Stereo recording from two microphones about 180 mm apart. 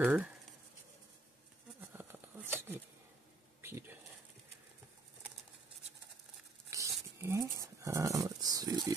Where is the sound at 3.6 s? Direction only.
15° right (ahead or behind).